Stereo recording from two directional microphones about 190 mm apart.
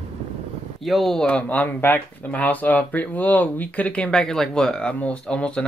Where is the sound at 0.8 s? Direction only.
Centre (ahead or behind).